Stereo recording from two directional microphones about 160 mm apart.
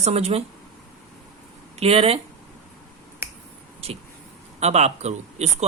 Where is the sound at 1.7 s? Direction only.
40° right (ahead or behind).